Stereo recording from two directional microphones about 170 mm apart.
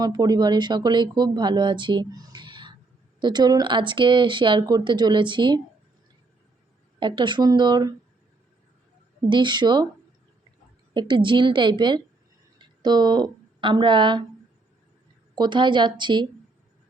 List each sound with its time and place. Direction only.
0.0 s speech: 25° right (ahead or behind)
7.0 s speech: 25° right (ahead or behind)
9.3 s speech: 25° right (ahead or behind)
10.9 s speech: 30° right (ahead or behind)
15.4 s speech: 25° right (ahead or behind)